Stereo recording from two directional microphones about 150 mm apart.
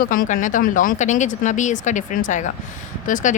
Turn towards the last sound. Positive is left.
turn(degrees=60)  # may be behind; listen again after turning